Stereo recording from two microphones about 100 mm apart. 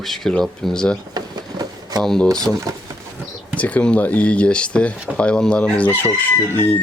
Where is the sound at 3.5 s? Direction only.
15° left (ahead or behind).